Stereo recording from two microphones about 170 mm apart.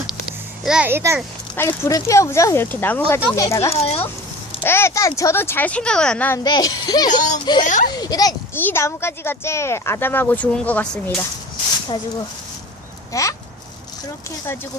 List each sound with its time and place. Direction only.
0.6 s a child's voice: 5° right (ahead or behind)
1.5 s speech: 15° left (ahead or behind)
3.7 s speech: 35° left (ahead or behind)
4.6 s speech: 15° left (ahead or behind)
6.4 s a child's voice: 20° left (ahead or behind)
7.1 s speech: 45° left (ahead or behind)
7.9 s a child's voice: 20° left (ahead or behind)
13.1 s a child's voice: 20° left (ahead or behind)